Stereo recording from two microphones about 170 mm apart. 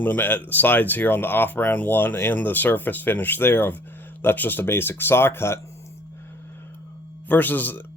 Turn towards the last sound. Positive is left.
turn(degrees=10)  # may be behind; listen again after turning